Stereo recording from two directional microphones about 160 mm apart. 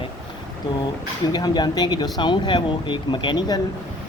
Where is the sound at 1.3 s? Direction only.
25° left (ahead or behind).